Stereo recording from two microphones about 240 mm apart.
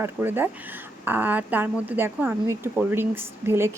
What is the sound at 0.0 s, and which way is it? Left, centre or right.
Speech, centre.